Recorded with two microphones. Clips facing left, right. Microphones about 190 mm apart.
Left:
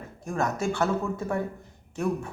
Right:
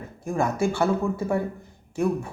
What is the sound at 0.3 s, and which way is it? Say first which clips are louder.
A woman's voice: right 4 dB; 10° right (ahead or behind).